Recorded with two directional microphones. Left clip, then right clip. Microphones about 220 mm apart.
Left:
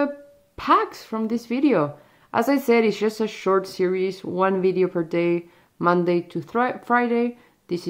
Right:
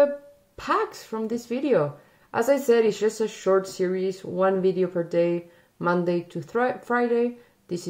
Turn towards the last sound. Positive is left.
turn(degrees=25)  # may be behind; listen again after turning